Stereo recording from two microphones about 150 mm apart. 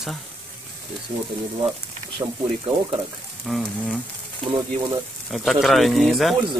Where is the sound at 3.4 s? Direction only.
Centre (ahead or behind).